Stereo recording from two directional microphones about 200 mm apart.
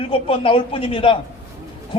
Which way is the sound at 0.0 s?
25° left (ahead or behind).